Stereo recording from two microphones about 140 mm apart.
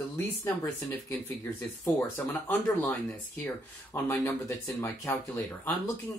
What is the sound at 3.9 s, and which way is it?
Speech, 20° left (ahead or behind).